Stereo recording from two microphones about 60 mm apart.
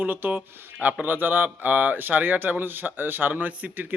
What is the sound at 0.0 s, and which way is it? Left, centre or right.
Speech, right.